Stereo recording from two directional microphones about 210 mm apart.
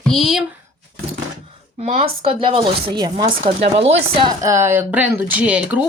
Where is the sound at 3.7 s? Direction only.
30° right (ahead or behind).